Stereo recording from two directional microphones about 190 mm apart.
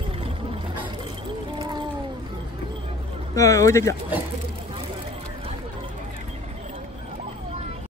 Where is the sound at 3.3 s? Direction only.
15° left (ahead or behind).